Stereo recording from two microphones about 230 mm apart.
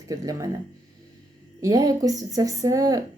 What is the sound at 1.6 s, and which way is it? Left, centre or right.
A woman's voice, centre.